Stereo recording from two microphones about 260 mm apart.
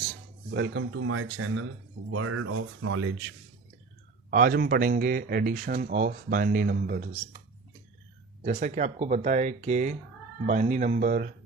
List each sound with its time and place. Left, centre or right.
0.5 s speech: right
4.3 s speech: right
8.4 s speech: right